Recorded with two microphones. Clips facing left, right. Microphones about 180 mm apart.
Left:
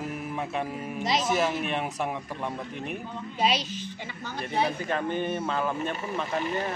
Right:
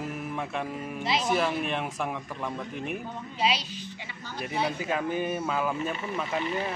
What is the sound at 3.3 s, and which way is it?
Speech, 45° left (ahead or behind).